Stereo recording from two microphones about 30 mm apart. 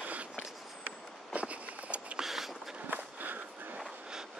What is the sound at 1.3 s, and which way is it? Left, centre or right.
Walk, right.